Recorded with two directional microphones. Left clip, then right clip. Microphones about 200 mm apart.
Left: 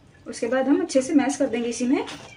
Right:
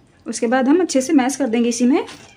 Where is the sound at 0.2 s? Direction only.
50° right (ahead or behind).